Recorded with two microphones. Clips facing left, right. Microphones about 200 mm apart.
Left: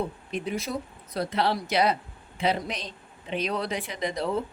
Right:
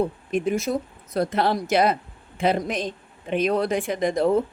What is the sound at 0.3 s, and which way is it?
A woman's voice, 50° right (ahead or behind).